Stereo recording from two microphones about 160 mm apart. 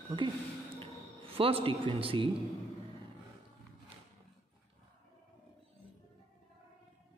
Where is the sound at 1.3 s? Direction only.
35° right (ahead or behind).